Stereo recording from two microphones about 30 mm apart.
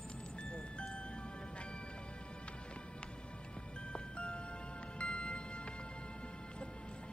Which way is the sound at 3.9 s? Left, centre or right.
Left.